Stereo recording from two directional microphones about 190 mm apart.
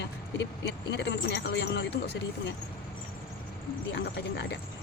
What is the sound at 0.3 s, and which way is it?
Speech, 65° left (ahead or behind).